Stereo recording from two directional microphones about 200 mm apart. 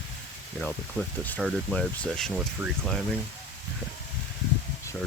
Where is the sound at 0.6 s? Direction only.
5° left (ahead or behind).